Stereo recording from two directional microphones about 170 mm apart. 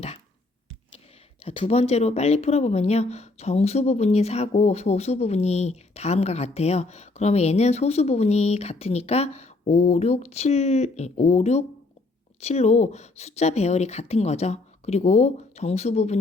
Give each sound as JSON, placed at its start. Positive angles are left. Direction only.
{"t": 1.5, "sound": "speech", "side_deg": 35}